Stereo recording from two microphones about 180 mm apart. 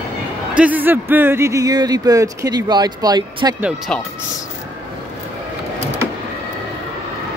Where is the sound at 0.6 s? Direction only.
10° right (ahead or behind).